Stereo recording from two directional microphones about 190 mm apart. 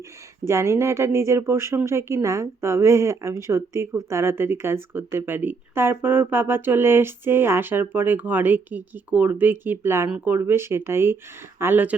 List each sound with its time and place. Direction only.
0.4 s speech: 15° right (ahead or behind)